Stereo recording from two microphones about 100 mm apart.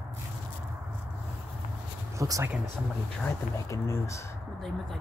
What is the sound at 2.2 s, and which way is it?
Speech, 30° right (ahead or behind).